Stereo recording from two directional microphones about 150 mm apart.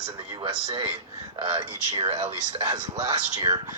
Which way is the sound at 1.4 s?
35° right (ahead or behind).